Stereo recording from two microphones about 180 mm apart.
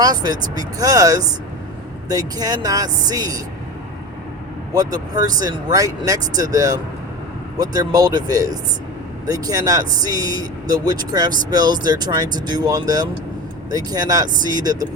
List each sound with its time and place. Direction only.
0.0 s speech: 20° right (ahead or behind)
4.7 s speech: 20° right (ahead or behind)